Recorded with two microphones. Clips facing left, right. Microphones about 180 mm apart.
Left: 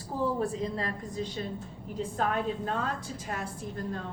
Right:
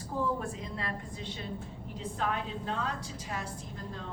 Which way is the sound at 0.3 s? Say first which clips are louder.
Left 7 dB; 35° left (ahead or behind).